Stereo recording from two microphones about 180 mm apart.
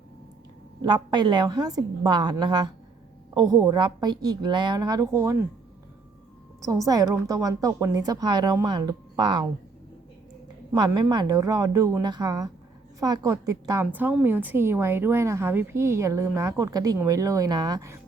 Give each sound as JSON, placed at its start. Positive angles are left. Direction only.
{"t": 0.8, "sound": "a woman's voice", "side_deg": -25}
{"t": 6.6, "sound": "a woman's voice", "side_deg": -15}
{"t": 10.7, "sound": "a woman's voice", "side_deg": -20}